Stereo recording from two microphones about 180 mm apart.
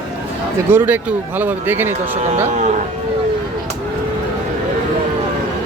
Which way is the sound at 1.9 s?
40° right (ahead or behind).